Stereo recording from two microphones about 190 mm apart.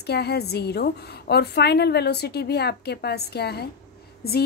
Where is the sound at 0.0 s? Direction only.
60° left (ahead or behind).